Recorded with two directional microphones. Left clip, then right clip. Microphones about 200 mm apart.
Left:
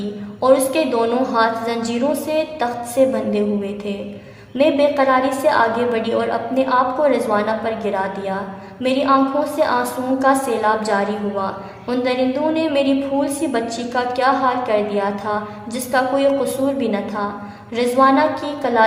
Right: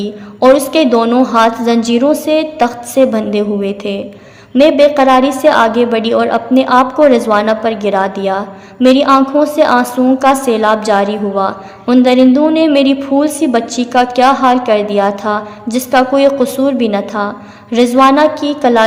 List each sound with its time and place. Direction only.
0.3 s a woman's voice: 35° right (ahead or behind)